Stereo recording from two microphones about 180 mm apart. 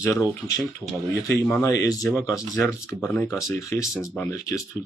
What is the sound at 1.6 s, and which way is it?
Speech, 20° left (ahead or behind).